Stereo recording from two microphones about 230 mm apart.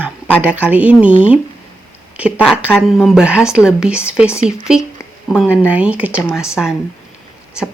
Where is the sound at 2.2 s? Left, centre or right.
Centre.